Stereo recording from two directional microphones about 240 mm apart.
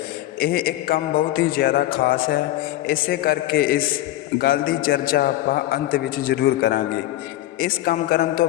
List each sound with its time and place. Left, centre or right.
0.3 s a man's voice: left